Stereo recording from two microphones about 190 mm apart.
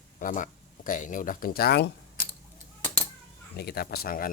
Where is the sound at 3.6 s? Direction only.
55° left (ahead or behind).